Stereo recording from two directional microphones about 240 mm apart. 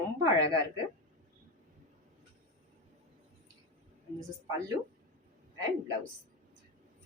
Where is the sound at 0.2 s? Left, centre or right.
Centre.